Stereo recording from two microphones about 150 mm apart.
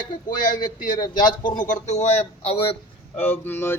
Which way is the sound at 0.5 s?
30° left (ahead or behind).